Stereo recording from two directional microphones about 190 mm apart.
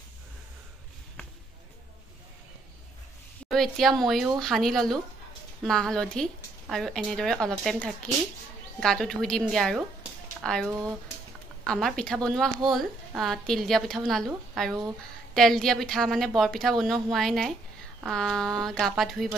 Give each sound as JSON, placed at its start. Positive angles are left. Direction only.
{"t": 3.4, "sound": "a woman's voice", "side_deg": 0}
{"t": 10.7, "sound": "speech", "side_deg": -15}
{"t": 11.6, "sound": "a woman's voice", "side_deg": 5}